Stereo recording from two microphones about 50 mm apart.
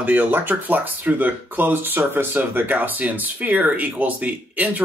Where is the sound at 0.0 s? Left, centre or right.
Right.